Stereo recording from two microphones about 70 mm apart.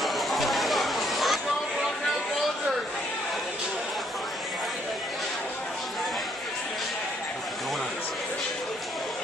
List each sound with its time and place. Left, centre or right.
0.0 s chatter: centre